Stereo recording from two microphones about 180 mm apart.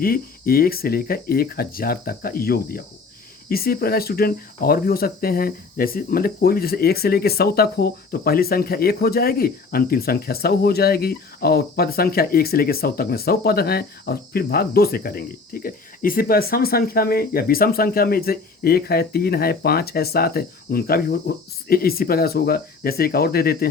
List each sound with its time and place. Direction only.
0.0 s speech: 55° left (ahead or behind)